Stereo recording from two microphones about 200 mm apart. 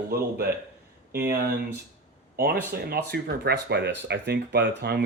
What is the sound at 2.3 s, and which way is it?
Speech, 50° right (ahead or behind).